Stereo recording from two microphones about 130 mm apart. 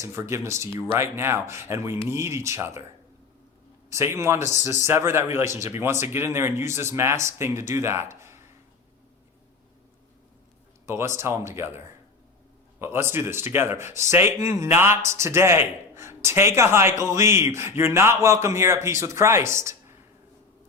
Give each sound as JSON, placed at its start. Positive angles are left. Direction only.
{"t": 0.0, "sound": "speech", "side_deg": -20}
{"t": 3.8, "sound": "speech", "side_deg": -20}
{"t": 10.8, "sound": "speech", "side_deg": -20}
{"t": 12.8, "sound": "speech", "side_deg": -20}